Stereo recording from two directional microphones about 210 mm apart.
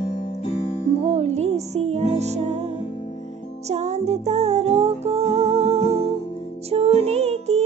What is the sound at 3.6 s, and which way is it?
Music, 30° right (ahead or behind).